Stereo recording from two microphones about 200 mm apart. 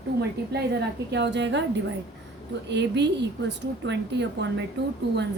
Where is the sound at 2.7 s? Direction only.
60° right (ahead or behind).